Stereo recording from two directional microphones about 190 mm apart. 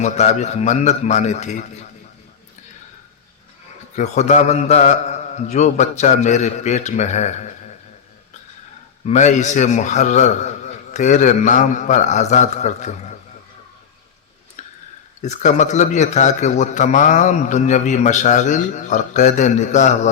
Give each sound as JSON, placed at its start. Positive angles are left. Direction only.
{"t": 0.0, "sound": "a man's voice", "side_deg": 35}
{"t": 3.9, "sound": "a man's voice", "side_deg": 35}
{"t": 9.0, "sound": "a man's voice", "side_deg": 40}
{"t": 14.6, "sound": "a sound", "side_deg": 40}
{"t": 15.2, "sound": "a man's voice", "side_deg": 40}